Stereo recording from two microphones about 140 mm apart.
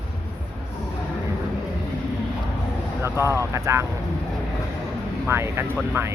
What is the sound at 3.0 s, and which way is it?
Speech, 20° right (ahead or behind).